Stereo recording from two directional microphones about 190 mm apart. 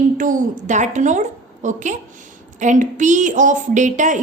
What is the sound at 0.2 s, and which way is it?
A woman's voice, 45° right (ahead or behind).